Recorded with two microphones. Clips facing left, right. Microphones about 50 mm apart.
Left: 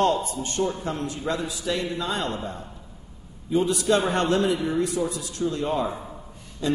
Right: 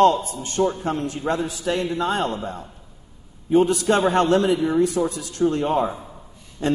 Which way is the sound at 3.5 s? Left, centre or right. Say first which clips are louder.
Right 4 dB; right.